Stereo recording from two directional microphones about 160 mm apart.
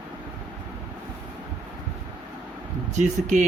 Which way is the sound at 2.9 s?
45° right (ahead or behind).